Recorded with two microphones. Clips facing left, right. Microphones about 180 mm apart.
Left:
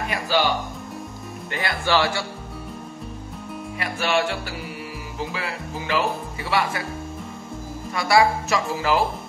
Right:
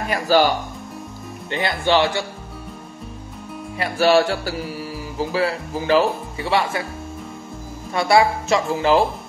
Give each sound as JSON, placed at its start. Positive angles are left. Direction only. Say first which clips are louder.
{"t": 0.1, "sound": "speech", "louder": "right 7 dB", "side_deg": -40}
{"t": 1.5, "sound": "speech", "louder": "right 4 dB", "side_deg": -20}
{"t": 3.7, "sound": "speech", "louder": "right 8 dB", "side_deg": -35}
{"t": 7.9, "sound": "speech", "louder": "right 2 dB", "side_deg": -25}